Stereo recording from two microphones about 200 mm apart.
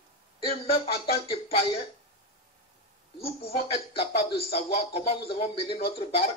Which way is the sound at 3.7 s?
30° left (ahead or behind).